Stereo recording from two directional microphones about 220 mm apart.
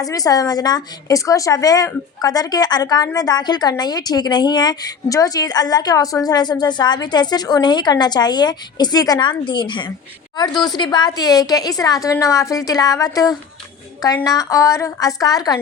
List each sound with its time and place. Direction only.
0.0 s a woman's voice: 15° left (ahead or behind)